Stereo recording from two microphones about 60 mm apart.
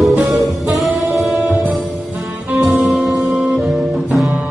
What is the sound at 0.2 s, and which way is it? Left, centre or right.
Music, centre.